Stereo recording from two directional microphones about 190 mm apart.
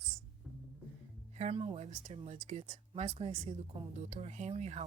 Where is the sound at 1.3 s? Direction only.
30° right (ahead or behind).